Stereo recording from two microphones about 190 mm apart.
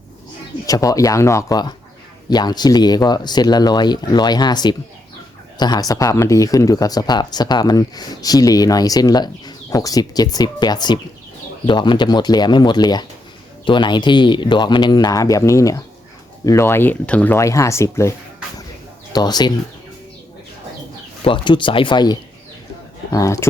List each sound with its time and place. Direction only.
0.6 s speech: 20° left (ahead or behind)
19.1 s speech: 20° left (ahead or behind)
21.2 s speech: 25° left (ahead or behind)